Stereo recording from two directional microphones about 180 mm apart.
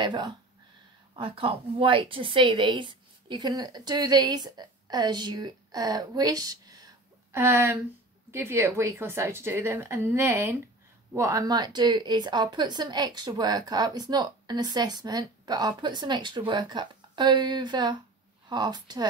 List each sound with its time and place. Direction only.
0.0 s a woman's voice: 25° right (ahead or behind)